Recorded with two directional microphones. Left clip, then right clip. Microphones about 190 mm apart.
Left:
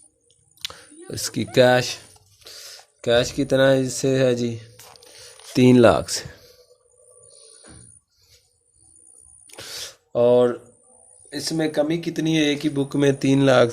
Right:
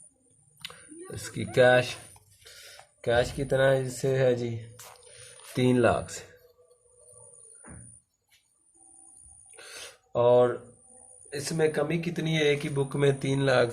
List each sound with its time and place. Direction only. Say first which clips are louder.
0.6 s speech: left 8 dB; 50° left (ahead or behind)
5.5 s speech: left 9 dB; 55° left (ahead or behind)
9.6 s a sound: left 9 dB; 50° left (ahead or behind)
11.3 s speech: left 2 dB; 50° left (ahead or behind)